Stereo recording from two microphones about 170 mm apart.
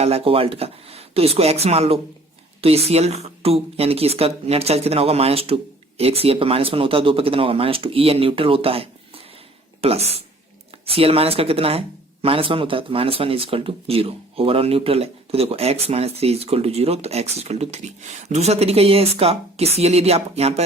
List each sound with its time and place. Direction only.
0.0 s speech: 35° right (ahead or behind)